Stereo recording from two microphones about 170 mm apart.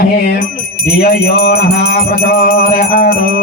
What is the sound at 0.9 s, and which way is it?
Music, 65° left (ahead or behind).